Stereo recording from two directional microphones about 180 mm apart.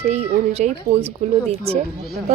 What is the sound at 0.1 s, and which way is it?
Speech, 35° right (ahead or behind).